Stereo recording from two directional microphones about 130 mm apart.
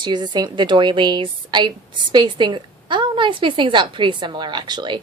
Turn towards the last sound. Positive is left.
turn(degrees=-35)  # may be behind; listen again after turning